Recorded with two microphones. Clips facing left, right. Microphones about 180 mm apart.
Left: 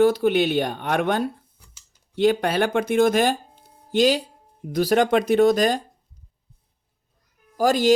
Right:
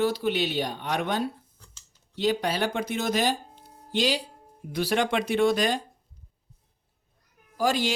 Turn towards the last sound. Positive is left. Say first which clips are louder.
# left 6 dB
turn(degrees=45)  # may be behind; listen again after turning